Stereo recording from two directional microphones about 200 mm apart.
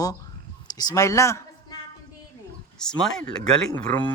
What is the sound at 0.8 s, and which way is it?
Speech, 15° left (ahead or behind).